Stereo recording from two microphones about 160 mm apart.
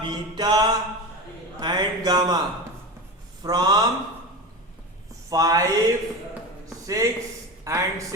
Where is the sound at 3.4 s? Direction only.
25° right (ahead or behind).